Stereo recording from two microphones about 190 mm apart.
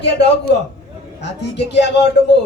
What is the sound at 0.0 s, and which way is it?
Speech, 65° left (ahead or behind).